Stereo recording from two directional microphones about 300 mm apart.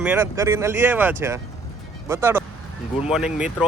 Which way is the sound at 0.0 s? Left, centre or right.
Centre.